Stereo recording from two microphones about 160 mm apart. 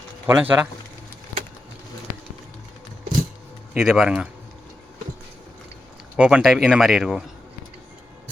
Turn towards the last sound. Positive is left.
turn(degrees=-5)  # may be behind; listen again after turning